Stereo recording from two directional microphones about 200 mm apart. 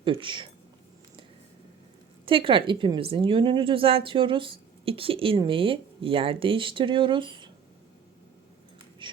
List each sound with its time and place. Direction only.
0.0 s a woman's voice: 25° right (ahead or behind)
2.2 s a woman's voice: 25° right (ahead or behind)